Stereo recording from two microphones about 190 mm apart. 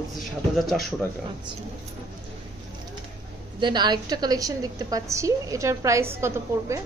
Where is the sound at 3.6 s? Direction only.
25° right (ahead or behind).